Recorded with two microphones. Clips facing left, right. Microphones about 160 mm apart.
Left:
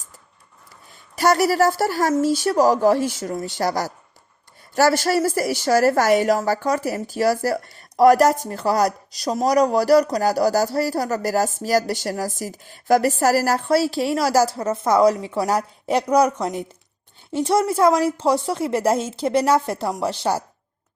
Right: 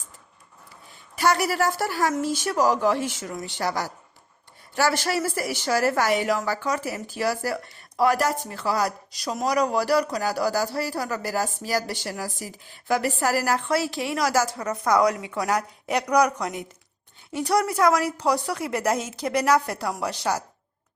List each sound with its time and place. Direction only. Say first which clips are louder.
1.1 s a woman's voice: left 5 dB; 40° left (ahead or behind)